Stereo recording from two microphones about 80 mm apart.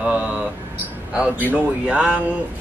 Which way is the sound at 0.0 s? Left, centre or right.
Centre.